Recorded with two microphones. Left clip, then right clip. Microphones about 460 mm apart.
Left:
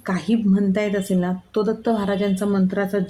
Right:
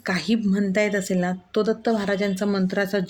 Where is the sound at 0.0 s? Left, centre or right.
Left.